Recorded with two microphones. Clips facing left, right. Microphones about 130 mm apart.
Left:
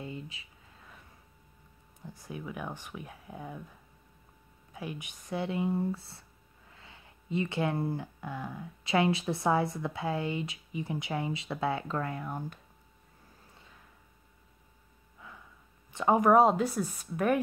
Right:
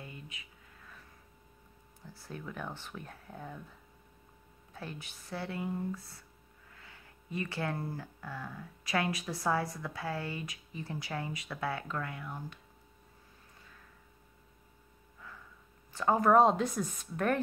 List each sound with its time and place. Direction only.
0.0 s a sound: 30° left (ahead or behind)
2.0 s speech: 15° left (ahead or behind)
4.7 s speech: 15° left (ahead or behind)
5.7 s speech: 30° left (ahead or behind); by 12.5 s 45° left (ahead or behind)
15.1 s a sound: 15° left (ahead or behind)
15.9 s speech: 20° left (ahead or behind)